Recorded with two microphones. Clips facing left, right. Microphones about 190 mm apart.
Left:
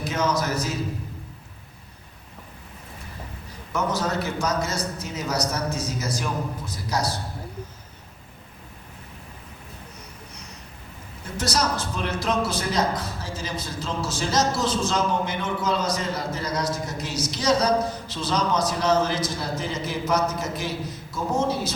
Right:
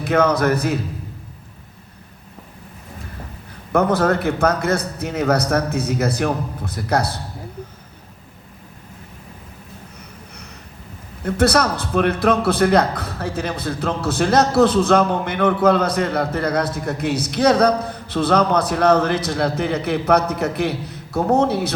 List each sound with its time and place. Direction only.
0.0 s a man's voice: 60° right (ahead or behind)
3.7 s a man's voice: 60° right (ahead or behind)
11.2 s a man's voice: 60° right (ahead or behind)